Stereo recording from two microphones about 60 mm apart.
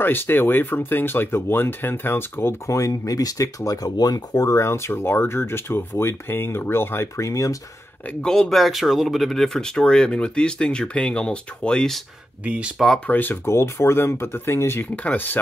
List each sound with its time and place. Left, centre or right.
0.0 s speech: left
2.6 s speech: left
7.2 s speech: left
8.2 s speech: centre
12.4 s speech: right
13.1 s speech: left
13.5 s speech: left